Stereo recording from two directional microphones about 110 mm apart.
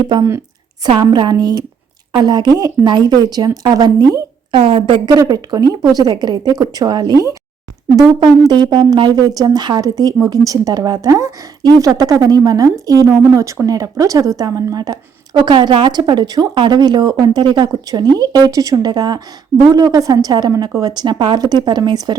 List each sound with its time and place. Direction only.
1.0 s speech: 40° right (ahead or behind)
4.5 s a woman's voice: 55° right (ahead or behind)
5.0 s speech: 35° right (ahead or behind)